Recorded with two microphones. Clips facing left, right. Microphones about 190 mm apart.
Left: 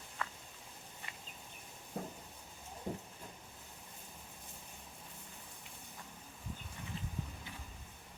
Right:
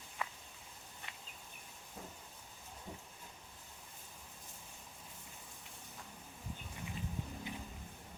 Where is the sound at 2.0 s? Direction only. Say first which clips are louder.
Left 8 dB; 60° left (ahead or behind).